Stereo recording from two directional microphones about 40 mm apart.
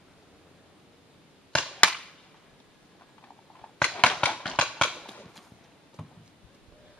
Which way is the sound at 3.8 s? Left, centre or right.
Left.